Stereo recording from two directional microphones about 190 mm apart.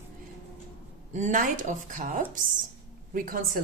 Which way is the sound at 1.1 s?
40° right (ahead or behind).